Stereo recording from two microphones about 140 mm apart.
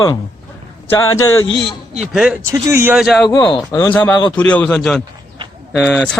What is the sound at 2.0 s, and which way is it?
Speech, 5° right (ahead or behind).